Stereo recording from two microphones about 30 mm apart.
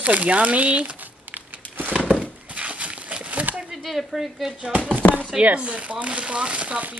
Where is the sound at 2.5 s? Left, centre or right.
Right.